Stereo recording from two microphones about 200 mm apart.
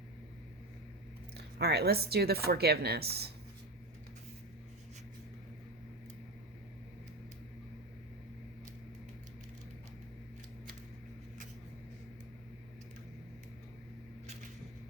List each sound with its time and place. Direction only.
1.4 s a woman's voice: 55° right (ahead or behind)